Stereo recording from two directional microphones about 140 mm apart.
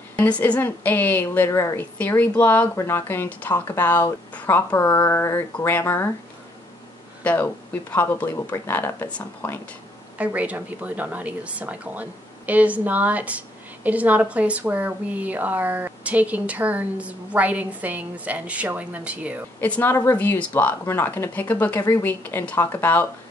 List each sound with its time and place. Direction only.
0.2 s a woman's voice: 10° left (ahead or behind)
7.2 s a woman's voice: 15° left (ahead or behind)
10.1 s a woman's voice: 10° right (ahead or behind)
19.6 s a woman's voice: 15° left (ahead or behind)